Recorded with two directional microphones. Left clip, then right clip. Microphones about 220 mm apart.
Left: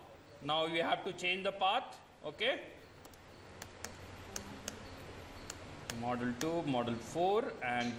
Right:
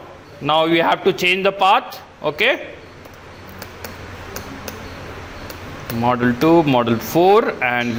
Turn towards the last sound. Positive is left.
turn(degrees=-45)  # may be behind; listen again after turning